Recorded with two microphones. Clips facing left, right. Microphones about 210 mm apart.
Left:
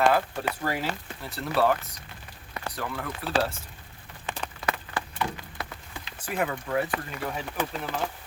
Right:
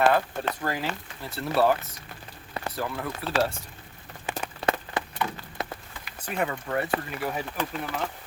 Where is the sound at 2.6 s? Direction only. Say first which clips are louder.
Right 3 dB; 30° right (ahead or behind).